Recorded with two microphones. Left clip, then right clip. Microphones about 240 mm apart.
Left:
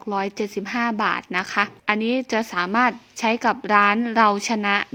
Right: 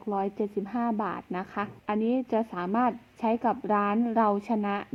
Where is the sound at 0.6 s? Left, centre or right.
Left.